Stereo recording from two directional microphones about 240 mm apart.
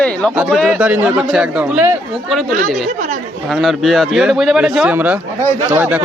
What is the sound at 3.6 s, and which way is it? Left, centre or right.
Speech, centre.